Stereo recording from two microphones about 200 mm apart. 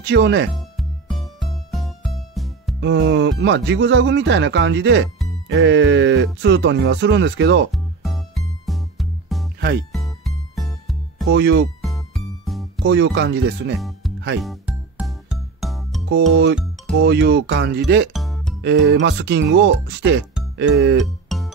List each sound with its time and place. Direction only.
0.0 s speech: 60° right (ahead or behind)
0.6 s music: centre (ahead or behind)
2.8 s speech: 65° right (ahead or behind)
7.7 s music: centre (ahead or behind)
9.6 s speech: 55° right (ahead or behind)
9.9 s music: centre (ahead or behind)
11.3 s speech: 60° right (ahead or behind)
11.8 s music: centre (ahead or behind)
12.8 s speech: 60° right (ahead or behind)
13.7 s music: centre (ahead or behind)
16.1 s speech: 55° right (ahead or behind)
18.1 s music: centre (ahead or behind)
18.6 s speech: 60° right (ahead or behind)
21.0 s music: centre (ahead or behind)